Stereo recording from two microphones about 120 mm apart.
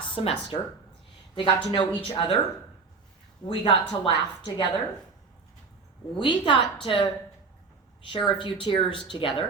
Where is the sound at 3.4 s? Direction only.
40° left (ahead or behind).